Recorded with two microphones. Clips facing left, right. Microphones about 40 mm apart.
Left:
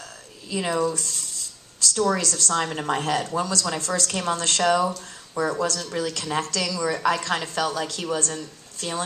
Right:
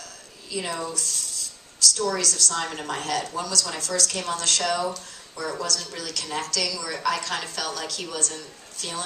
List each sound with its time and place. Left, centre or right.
0.5 s speech: centre
2.0 s a woman's voice: left
2.5 s speech: left